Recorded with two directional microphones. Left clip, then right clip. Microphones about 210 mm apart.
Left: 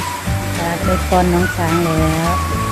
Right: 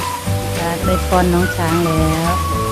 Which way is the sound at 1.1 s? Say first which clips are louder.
Left 1 dB; 5° right (ahead or behind).